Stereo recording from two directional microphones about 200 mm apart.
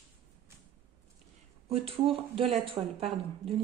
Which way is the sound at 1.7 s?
30° right (ahead or behind).